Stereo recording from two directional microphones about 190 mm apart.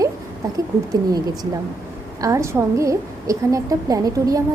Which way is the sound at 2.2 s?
15° right (ahead or behind).